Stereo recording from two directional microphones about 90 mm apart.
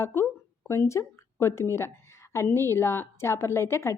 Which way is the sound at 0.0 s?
30° left (ahead or behind).